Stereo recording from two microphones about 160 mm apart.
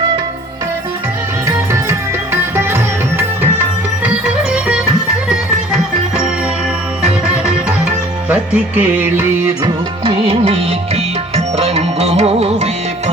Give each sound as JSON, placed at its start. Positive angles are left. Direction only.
{"t": 1.5, "sound": "music", "side_deg": -20}
{"t": 10.0, "sound": "music", "side_deg": -35}